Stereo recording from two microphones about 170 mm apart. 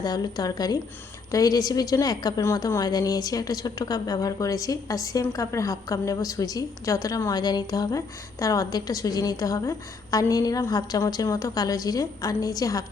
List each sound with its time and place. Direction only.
0.0 s a woman's voice: 25° left (ahead or behind)